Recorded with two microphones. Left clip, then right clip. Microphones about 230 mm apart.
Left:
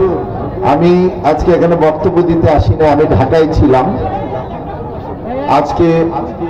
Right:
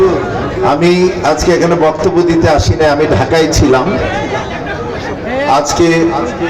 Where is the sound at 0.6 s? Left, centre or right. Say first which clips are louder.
Even; right.